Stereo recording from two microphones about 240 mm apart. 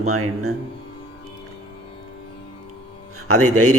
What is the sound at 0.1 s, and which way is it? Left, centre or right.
Speech, right.